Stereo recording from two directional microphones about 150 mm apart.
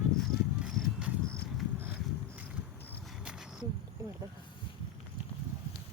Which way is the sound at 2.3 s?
10° right (ahead or behind).